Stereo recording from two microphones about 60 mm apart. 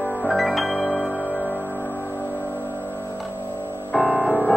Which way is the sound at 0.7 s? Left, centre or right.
Centre.